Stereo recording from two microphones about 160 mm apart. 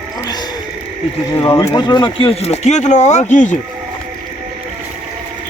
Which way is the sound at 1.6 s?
25° left (ahead or behind).